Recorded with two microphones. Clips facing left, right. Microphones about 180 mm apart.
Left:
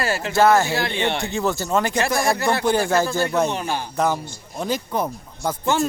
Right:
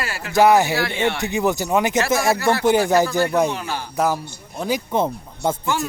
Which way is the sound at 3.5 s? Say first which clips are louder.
Left 2 dB; 20° left (ahead or behind).